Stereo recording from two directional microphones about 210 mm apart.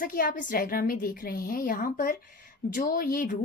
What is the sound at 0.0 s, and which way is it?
A woman's voice, 45° left (ahead or behind).